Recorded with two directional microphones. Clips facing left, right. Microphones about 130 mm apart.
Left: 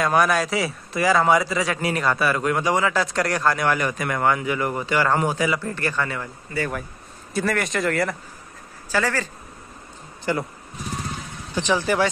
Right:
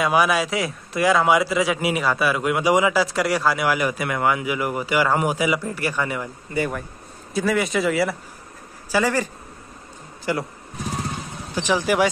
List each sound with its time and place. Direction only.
0.0 s speech: 5° right (ahead or behind)
7.3 s speech: centre (ahead or behind)
8.9 s speech: 15° right (ahead or behind)
11.5 s speech: 10° right (ahead or behind)